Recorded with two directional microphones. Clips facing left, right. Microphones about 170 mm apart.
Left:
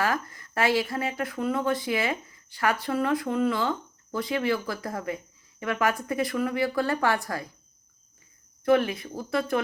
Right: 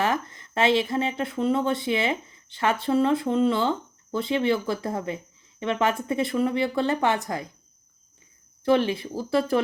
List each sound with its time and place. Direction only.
0.0 s speech: 25° right (ahead or behind)
8.6 s speech: 30° right (ahead or behind)